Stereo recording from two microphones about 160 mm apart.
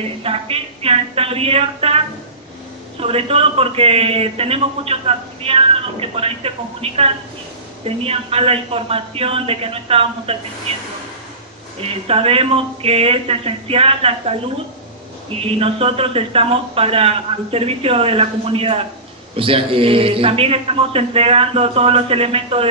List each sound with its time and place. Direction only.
0.2 s a man's voice: 35° right (ahead or behind)
3.0 s a man's voice: 35° right (ahead or behind)
12.1 s a man's voice: 35° right (ahead or behind)
15.6 s a man's voice: 35° right (ahead or behind)